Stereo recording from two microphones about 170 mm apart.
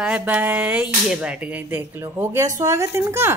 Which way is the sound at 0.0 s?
10° right (ahead or behind).